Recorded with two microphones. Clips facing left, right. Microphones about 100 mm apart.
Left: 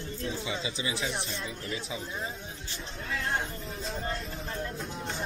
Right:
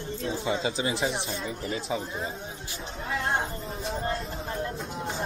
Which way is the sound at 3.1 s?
30° right (ahead or behind).